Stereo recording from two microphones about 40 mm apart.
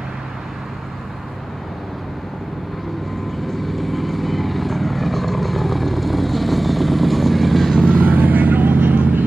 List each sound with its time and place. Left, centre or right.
3.4 s vehicle: centre
8.2 s vehicle: right